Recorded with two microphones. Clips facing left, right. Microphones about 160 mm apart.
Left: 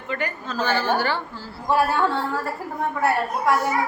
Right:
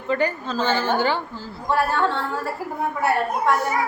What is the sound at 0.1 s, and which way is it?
A woman's voice, 30° right (ahead or behind).